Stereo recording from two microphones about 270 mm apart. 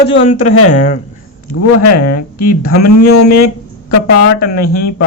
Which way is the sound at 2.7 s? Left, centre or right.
Left.